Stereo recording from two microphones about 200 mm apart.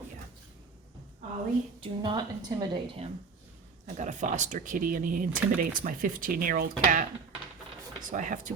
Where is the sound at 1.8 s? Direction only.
25° right (ahead or behind); by 7.0 s 45° right (ahead or behind).